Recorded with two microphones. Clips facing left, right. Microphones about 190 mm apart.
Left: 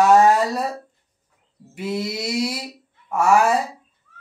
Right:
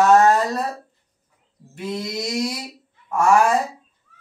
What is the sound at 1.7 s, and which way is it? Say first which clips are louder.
Speech: left 2 dB; 10° left (ahead or behind).